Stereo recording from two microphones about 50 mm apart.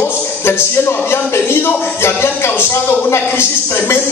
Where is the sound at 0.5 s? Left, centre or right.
Left.